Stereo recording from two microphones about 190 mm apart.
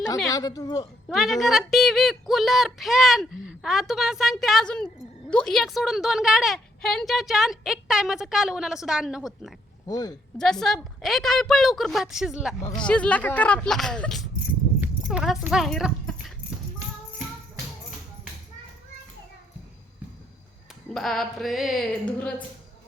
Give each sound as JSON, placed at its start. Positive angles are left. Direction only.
{"t": 0.3, "sound": "a woman's voice", "side_deg": 20}
{"t": 1.0, "sound": "a woman's voice", "side_deg": 0}
{"t": 9.8, "sound": "speech", "side_deg": 20}
{"t": 10.3, "sound": "a woman's voice", "side_deg": 0}
{"t": 12.6, "sound": "a woman's voice", "side_deg": 25}
{"t": 12.9, "sound": "speech", "side_deg": 5}
{"t": 14.8, "sound": "dog", "side_deg": -5}
{"t": 20.9, "sound": "a woman's voice", "side_deg": 0}